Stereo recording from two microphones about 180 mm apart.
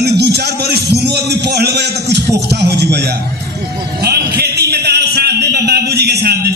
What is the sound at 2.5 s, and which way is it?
Music, 65° right (ahead or behind).